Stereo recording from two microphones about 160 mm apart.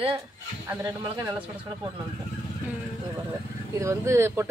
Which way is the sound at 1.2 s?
15° right (ahead or behind).